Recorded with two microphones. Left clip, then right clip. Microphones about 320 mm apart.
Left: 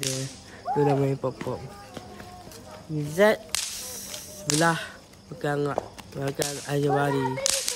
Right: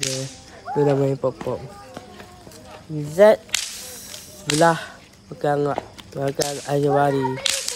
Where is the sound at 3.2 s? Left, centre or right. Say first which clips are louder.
Right 7 dB; centre.